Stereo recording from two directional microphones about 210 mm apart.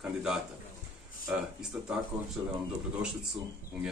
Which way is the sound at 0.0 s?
5° right (ahead or behind).